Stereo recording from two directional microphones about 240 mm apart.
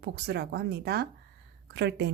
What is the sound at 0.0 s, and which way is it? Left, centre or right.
A woman's voice, right.